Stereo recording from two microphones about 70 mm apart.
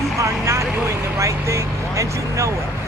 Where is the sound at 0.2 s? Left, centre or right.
Right.